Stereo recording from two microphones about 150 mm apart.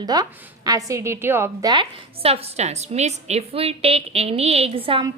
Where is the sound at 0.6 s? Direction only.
20° right (ahead or behind).